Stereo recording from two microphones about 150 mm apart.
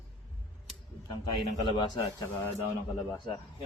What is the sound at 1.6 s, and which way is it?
Speech, 35° left (ahead or behind).